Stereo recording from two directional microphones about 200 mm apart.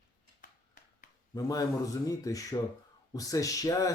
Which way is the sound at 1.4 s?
15° left (ahead or behind).